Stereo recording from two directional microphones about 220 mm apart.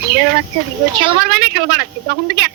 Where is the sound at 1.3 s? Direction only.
45° right (ahead or behind).